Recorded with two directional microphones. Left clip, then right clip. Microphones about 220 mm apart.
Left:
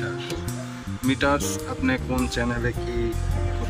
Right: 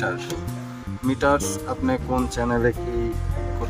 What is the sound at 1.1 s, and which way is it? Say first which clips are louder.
Speech: right 2 dB; 35° right (ahead or behind).